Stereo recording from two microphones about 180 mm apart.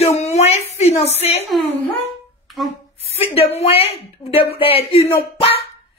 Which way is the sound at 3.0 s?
35° left (ahead or behind).